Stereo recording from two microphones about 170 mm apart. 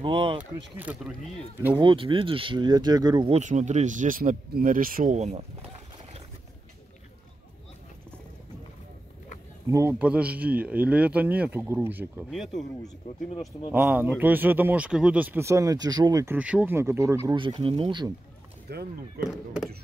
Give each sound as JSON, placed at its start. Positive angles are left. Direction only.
{"t": 0.0, "sound": "speech", "side_deg": -30}
{"t": 0.7, "sound": "speech", "side_deg": -5}
{"t": 1.8, "sound": "speech", "side_deg": -30}
{"t": 3.3, "sound": "speech", "side_deg": -45}
{"t": 9.7, "sound": "speech", "side_deg": -15}
{"t": 12.3, "sound": "speech", "side_deg": 0}
{"t": 16.3, "sound": "speech", "side_deg": -5}
{"t": 17.4, "sound": "speech", "side_deg": -30}
{"t": 18.7, "sound": "speech", "side_deg": -75}